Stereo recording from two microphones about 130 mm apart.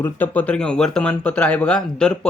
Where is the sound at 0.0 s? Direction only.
15° left (ahead or behind).